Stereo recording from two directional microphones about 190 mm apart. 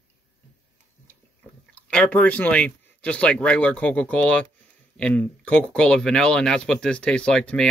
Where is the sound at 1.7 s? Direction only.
5° left (ahead or behind).